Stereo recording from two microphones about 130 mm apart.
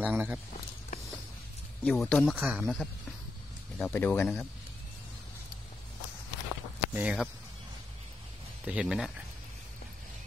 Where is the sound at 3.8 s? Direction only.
15° left (ahead or behind).